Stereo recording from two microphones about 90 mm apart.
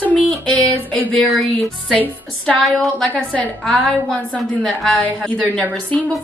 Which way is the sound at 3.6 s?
5° left (ahead or behind).